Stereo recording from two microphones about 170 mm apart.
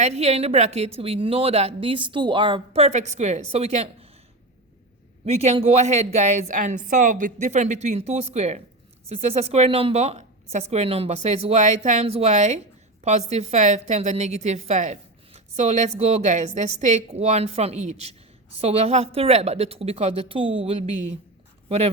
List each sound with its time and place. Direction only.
0.0 s a woman's voice: 40° right (ahead or behind)
5.2 s a woman's voice: 40° right (ahead or behind)